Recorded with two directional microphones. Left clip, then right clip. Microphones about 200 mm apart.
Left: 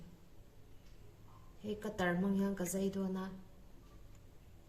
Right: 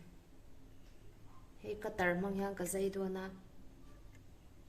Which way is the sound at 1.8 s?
40° right (ahead or behind).